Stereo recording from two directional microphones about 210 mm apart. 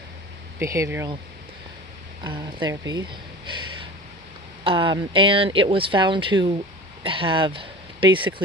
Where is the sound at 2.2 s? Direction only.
20° right (ahead or behind).